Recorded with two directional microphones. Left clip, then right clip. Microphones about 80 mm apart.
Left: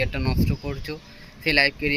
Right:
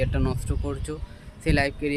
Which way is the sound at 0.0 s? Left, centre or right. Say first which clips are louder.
Left 2 dB; right.